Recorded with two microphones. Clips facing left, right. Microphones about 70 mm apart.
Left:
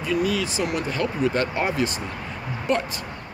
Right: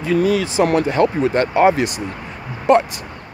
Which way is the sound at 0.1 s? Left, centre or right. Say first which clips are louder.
Right 7 dB; right.